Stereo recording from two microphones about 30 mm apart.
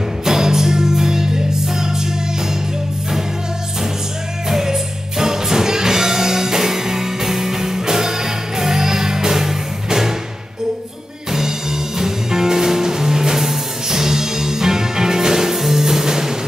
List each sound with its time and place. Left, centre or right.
0.2 s music: centre
4.5 s music: centre
12.0 s music: centre